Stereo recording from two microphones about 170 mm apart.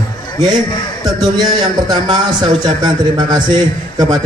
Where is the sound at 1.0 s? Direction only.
25° right (ahead or behind).